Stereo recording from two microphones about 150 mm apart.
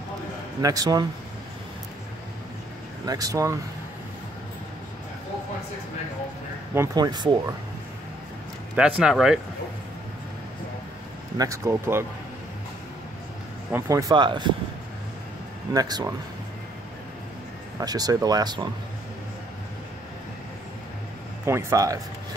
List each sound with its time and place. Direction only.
0.6 s speech: 25° right (ahead or behind)
3.1 s speech: 25° right (ahead or behind)
6.7 s speech: 20° right (ahead or behind)
8.7 s speech: 5° right (ahead or behind)
11.3 s speech: 20° right (ahead or behind)
13.7 s speech: 20° right (ahead or behind)
15.7 s speech: 25° right (ahead or behind)
17.7 s speech: 25° right (ahead or behind)
21.5 s speech: 20° right (ahead or behind)